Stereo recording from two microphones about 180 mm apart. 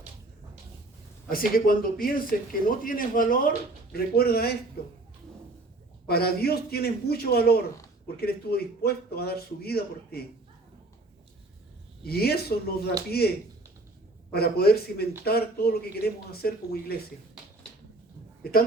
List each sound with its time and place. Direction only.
1.3 s a man's voice: 50° left (ahead or behind)
6.1 s a man's voice: 60° left (ahead or behind)
12.0 s a man's voice: 60° left (ahead or behind)
14.3 s a man's voice: 60° left (ahead or behind)